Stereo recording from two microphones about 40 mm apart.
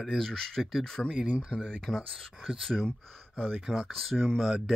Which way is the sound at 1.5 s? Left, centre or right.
Left.